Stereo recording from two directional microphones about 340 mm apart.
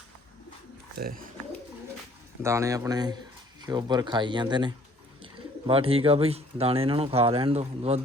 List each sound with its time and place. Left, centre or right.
0.9 s speech: right
2.4 s speech: centre